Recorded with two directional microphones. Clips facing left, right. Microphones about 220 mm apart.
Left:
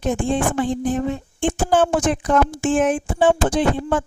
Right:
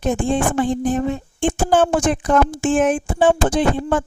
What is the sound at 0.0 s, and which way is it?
Speech, 45° right (ahead or behind).